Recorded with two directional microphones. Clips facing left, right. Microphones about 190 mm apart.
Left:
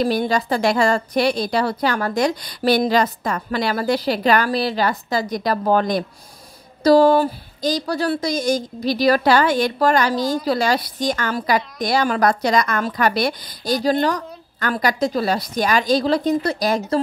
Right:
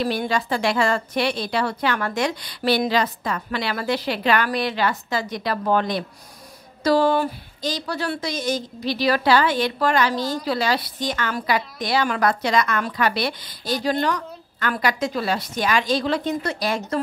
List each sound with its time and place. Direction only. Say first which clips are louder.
0.0 s a woman's voice: left 4 dB; 40° left (ahead or behind)